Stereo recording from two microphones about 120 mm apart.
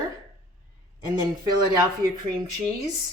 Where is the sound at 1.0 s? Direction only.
35° right (ahead or behind).